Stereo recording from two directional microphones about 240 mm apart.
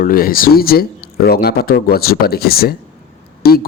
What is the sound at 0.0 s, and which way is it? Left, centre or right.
A man's voice, left.